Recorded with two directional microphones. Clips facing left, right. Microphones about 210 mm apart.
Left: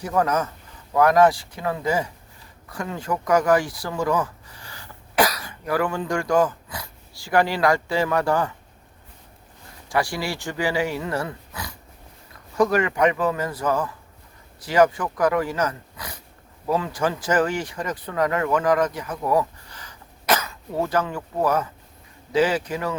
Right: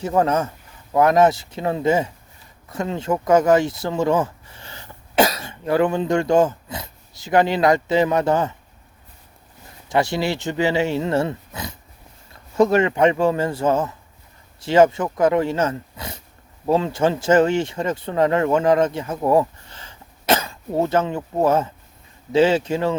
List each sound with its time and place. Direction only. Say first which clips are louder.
0.0 s speech: right 3 dB; 25° right (ahead or behind)
9.9 s speech: right 5 dB; 25° right (ahead or behind)